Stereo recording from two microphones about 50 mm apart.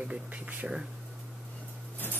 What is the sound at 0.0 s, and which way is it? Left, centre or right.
Speech, right.